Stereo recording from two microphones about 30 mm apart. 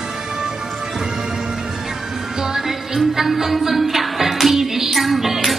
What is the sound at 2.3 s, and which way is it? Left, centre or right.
Music, centre.